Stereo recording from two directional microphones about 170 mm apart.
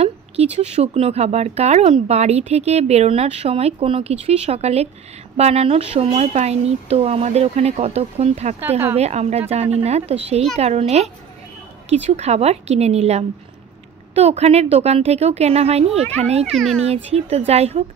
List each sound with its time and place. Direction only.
0.0 s speech: 35° right (ahead or behind)
8.5 s speech: 10° right (ahead or behind)
8.9 s speech: 40° right (ahead or behind)
16.5 s a child's voice: centre (ahead or behind)
16.8 s speech: 35° right (ahead or behind)